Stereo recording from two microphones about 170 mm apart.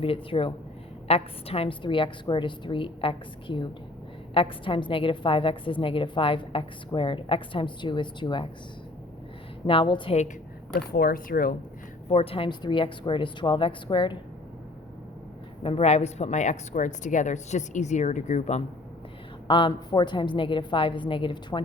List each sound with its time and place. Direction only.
0.0 s a woman's voice: 35° left (ahead or behind)
9.6 s a woman's voice: 30° left (ahead or behind)
10.8 s speech: 60° left (ahead or behind)
12.0 s a woman's voice: 35° left (ahead or behind)
15.6 s a woman's voice: 35° left (ahead or behind)
19.5 s a woman's voice: 30° left (ahead or behind)